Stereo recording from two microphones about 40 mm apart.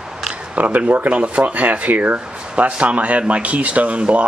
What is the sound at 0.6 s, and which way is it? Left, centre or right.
Speech, right.